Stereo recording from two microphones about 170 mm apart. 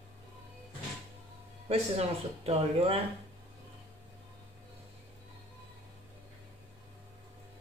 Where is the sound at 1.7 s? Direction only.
35° right (ahead or behind).